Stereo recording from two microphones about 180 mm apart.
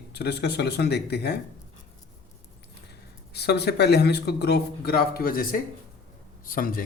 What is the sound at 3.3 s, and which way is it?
Speech, 65° left (ahead or behind).